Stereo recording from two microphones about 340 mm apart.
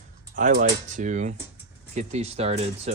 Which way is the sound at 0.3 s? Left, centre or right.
Right.